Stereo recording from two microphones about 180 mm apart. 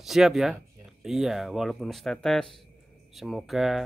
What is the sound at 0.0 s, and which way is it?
Speech, centre (ahead or behind).